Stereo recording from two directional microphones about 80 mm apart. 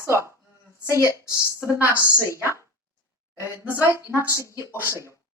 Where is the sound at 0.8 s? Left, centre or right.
Left.